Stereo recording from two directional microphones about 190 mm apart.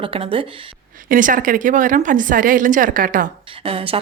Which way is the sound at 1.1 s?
45° right (ahead or behind).